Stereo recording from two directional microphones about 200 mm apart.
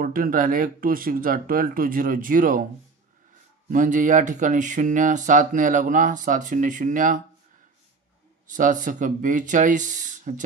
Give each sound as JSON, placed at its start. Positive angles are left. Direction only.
{"t": 0.0, "sound": "speech", "side_deg": -45}
{"t": 3.7, "sound": "speech", "side_deg": -40}
{"t": 8.5, "sound": "speech", "side_deg": -40}